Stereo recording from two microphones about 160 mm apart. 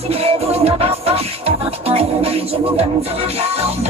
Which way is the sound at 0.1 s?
40° right (ahead or behind).